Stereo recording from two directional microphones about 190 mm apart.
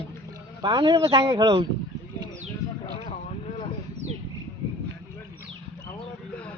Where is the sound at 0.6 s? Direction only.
25° right (ahead or behind).